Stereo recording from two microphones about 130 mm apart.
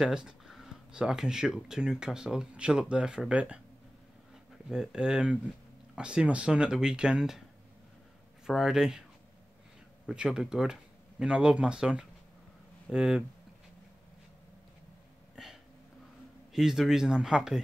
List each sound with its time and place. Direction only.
0.0 s speech: 5° right (ahead or behind)
4.6 s speech: 5° right (ahead or behind)
8.5 s speech: 5° right (ahead or behind)
10.0 s speech: 5° right (ahead or behind)
16.5 s speech: centre (ahead or behind)